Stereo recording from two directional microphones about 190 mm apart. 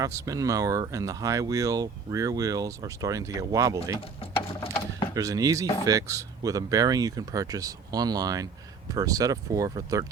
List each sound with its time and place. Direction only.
0.0 s speech: 15° right (ahead or behind)
4.2 s gears: 30° left (ahead or behind)
5.1 s speech: 20° right (ahead or behind)